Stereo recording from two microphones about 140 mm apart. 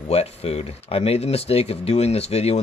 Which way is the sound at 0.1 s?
45° left (ahead or behind).